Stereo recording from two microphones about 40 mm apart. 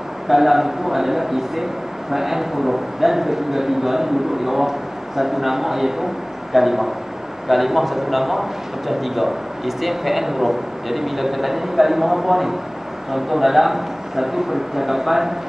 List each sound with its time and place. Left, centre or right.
0.3 s a man's voice: centre